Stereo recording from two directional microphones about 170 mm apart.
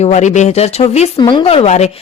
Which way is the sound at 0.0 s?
45° left (ahead or behind).